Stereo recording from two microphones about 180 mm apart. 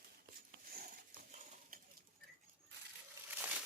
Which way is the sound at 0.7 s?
55° right (ahead or behind).